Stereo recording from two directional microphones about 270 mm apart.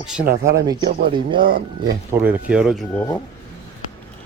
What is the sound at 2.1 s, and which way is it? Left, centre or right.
Speech, centre.